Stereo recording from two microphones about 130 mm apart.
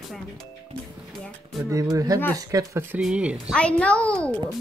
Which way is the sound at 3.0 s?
10° right (ahead or behind).